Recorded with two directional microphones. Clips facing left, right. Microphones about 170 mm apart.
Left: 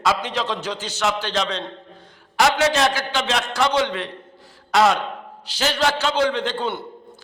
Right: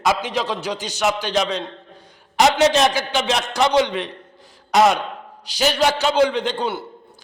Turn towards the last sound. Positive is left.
turn(degrees=-10)  # may be behind; listen again after turning